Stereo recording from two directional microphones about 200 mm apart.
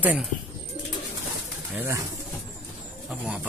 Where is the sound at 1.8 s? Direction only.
15° right (ahead or behind).